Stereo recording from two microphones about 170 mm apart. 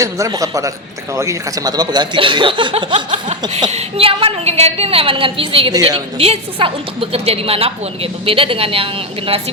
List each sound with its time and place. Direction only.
0.0 s a woman's voice: 20° right (ahead or behind)